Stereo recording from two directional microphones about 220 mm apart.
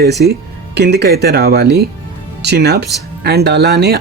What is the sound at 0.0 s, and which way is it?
Speech, 50° right (ahead or behind).